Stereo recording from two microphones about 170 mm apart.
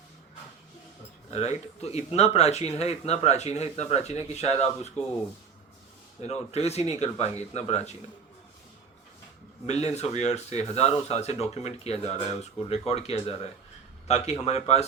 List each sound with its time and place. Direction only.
1.3 s speech: 40° left (ahead or behind)
6.2 s speech: 40° left (ahead or behind)
9.6 s speech: 40° left (ahead or behind)